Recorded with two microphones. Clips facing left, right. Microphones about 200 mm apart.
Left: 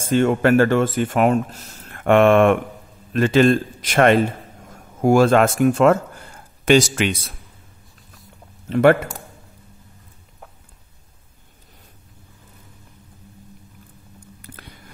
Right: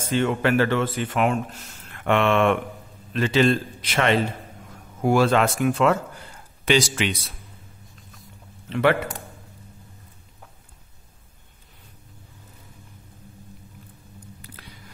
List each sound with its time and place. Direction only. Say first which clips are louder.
0.0 s speech: left 5 dB; 50° left (ahead or behind)
8.6 s speech: left 6 dB; 45° left (ahead or behind)
14.4 s a sound: left 3 dB; 50° left (ahead or behind)